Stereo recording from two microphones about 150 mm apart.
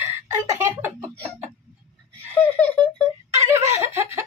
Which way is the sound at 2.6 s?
10° left (ahead or behind).